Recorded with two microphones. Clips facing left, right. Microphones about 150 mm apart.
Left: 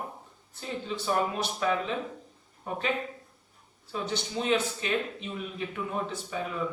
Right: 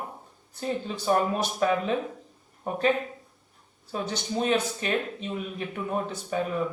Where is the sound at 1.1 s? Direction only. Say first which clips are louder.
Right 5 dB; 45° right (ahead or behind).